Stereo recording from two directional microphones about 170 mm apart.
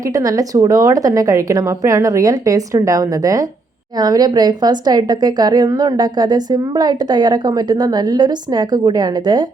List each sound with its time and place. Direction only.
0.1 s a woman's voice: 20° right (ahead or behind)